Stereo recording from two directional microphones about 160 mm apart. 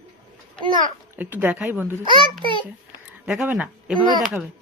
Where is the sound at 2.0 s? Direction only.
30° right (ahead or behind).